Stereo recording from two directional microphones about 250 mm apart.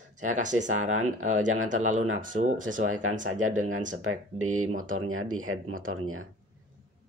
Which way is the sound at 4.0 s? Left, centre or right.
Right.